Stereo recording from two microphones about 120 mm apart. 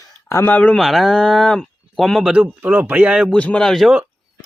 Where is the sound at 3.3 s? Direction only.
10° left (ahead or behind).